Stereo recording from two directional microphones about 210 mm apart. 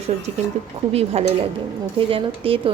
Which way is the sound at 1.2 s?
30° right (ahead or behind).